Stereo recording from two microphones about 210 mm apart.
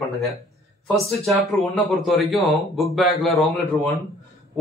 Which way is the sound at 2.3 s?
Centre (ahead or behind).